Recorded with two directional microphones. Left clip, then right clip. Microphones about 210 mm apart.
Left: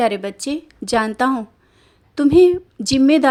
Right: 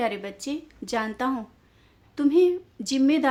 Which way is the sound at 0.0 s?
35° left (ahead or behind).